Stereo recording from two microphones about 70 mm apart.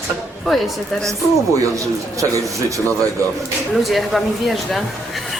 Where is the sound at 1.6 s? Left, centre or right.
Right.